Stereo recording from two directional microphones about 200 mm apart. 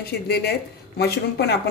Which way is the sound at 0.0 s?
55° left (ahead or behind).